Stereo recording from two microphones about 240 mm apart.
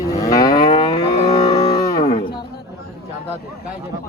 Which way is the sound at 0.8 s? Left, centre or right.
Left.